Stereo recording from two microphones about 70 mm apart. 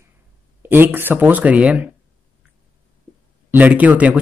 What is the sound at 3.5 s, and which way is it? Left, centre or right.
Speech, right.